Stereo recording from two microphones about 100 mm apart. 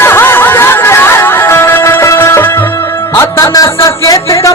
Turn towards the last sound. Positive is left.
turn(degrees=30)  # may be behind; listen again after turning